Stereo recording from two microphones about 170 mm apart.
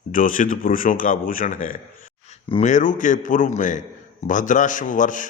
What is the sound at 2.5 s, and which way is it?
A man's voice, 40° left (ahead or behind).